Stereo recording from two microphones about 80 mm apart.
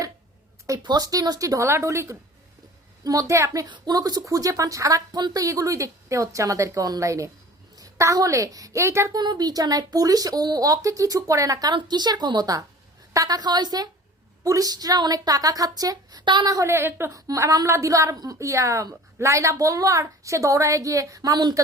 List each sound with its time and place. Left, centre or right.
0.8 s speech: right
3.0 s a woman's voice: right
9.1 s speech: right
11.7 s a woman's voice: right
14.4 s speech: right
16.2 s speech: right
16.5 s a woman's voice: right
17.2 s a woman's voice: right